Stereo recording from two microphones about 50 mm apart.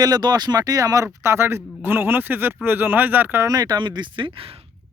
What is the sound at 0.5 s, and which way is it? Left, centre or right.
Speech, right.